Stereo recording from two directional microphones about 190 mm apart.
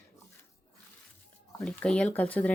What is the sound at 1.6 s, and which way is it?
Speech, 5° left (ahead or behind).